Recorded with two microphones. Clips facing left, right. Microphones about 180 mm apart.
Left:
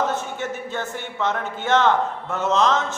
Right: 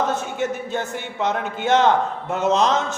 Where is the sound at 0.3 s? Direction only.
15° right (ahead or behind).